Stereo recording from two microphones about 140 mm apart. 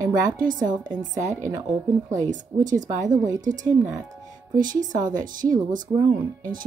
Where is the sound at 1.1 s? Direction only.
60° right (ahead or behind).